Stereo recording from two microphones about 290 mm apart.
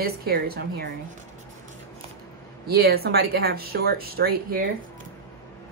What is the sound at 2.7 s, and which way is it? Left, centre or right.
Speech, right.